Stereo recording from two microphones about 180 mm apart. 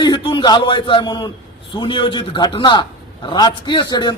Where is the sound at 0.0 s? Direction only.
25° left (ahead or behind).